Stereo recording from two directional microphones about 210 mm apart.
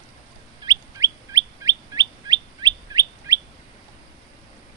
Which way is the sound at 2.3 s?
20° right (ahead or behind).